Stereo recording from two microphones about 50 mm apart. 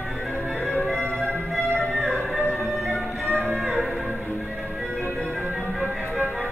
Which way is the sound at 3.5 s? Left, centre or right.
Centre.